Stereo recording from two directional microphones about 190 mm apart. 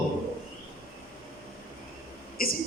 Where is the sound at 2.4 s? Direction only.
50° left (ahead or behind).